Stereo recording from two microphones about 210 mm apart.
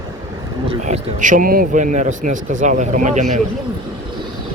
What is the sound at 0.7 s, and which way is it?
Speech, 35° right (ahead or behind).